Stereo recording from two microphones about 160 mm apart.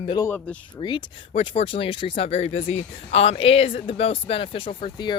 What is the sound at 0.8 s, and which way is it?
Speech, 30° left (ahead or behind).